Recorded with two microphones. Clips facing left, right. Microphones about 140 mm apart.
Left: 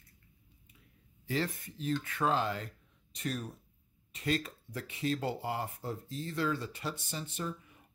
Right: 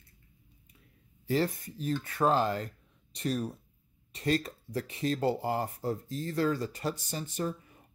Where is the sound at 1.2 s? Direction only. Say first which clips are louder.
Right 5 dB; 40° right (ahead or behind).